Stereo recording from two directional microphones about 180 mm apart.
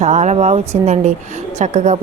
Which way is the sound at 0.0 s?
40° right (ahead or behind).